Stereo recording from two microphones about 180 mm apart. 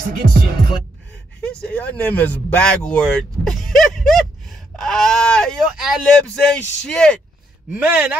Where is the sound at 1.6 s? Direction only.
5° left (ahead or behind).